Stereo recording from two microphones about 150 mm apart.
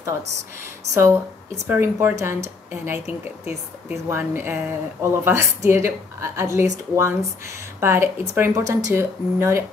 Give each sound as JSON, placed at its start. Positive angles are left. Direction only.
{"t": 1.7, "sound": "speech", "side_deg": -15}